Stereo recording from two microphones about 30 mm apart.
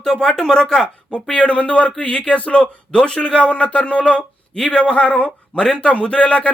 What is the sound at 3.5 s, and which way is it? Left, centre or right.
Speech, left.